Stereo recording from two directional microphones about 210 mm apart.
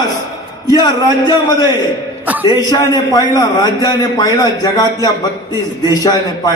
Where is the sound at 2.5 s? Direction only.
20° left (ahead or behind).